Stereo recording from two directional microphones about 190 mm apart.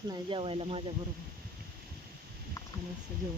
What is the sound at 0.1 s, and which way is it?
Speech, 25° right (ahead or behind).